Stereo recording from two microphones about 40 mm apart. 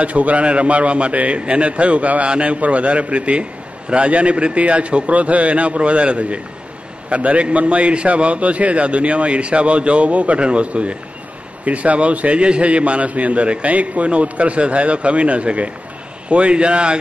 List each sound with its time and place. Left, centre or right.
0.0 s a man's voice: right